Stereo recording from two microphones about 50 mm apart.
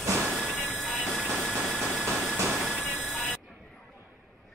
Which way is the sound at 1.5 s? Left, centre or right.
Centre.